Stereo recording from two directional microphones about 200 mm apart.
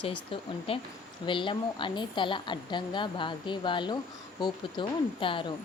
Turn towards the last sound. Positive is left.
turn(degrees=25)  # may be behind; listen again after turning